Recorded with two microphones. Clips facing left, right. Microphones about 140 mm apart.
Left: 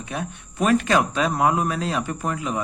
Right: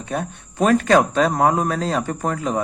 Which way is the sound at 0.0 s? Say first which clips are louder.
Right 4 dB; 45° right (ahead or behind).